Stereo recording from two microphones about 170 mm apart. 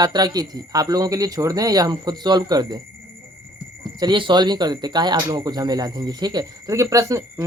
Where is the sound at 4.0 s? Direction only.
25° right (ahead or behind).